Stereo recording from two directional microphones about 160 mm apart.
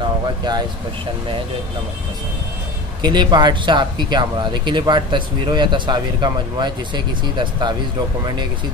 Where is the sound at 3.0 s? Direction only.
25° right (ahead or behind).